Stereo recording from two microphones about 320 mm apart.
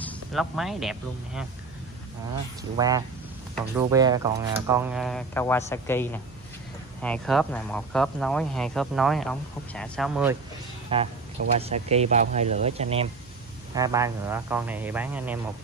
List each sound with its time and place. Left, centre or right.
0.0 s speech: centre
2.8 s speech: centre
10.9 s speech: centre